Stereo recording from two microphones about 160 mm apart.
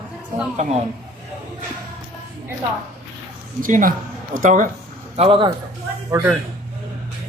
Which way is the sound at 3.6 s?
55° right (ahead or behind).